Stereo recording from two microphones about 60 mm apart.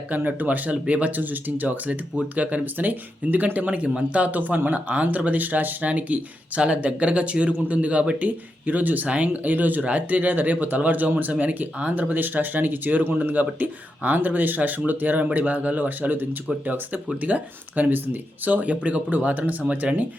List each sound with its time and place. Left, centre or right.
0.1 s speech: right